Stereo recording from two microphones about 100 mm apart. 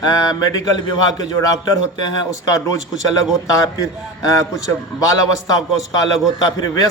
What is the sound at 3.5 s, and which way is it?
Speech, 35° left (ahead or behind).